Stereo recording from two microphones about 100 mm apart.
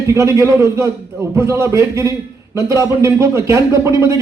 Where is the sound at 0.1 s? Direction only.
30° right (ahead or behind).